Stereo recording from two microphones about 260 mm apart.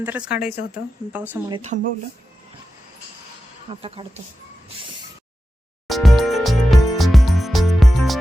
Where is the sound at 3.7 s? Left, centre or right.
Centre.